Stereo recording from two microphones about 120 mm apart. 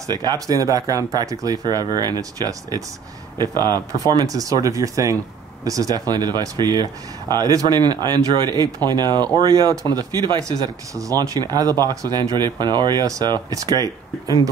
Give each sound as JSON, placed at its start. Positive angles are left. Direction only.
{"t": 0.1, "sound": "speech", "side_deg": -35}